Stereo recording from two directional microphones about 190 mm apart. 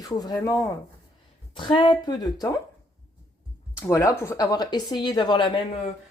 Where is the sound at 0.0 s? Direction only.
20° left (ahead or behind).